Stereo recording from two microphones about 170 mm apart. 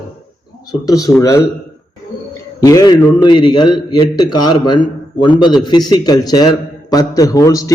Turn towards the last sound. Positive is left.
turn(degrees=20)  # may be behind; listen again after turning